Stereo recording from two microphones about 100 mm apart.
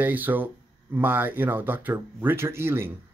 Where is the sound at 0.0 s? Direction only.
20° right (ahead or behind).